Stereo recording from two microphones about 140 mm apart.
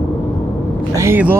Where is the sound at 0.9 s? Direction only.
15° right (ahead or behind).